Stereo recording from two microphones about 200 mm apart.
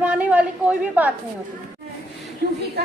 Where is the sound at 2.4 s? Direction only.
50° right (ahead or behind).